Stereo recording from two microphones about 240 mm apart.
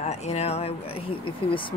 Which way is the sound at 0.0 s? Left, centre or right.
Left.